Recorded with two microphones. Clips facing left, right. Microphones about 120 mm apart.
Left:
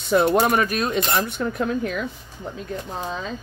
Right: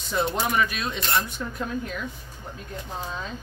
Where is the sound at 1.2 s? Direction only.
65° left (ahead or behind).